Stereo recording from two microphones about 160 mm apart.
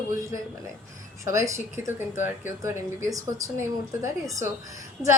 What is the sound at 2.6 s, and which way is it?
Speech, 20° right (ahead or behind).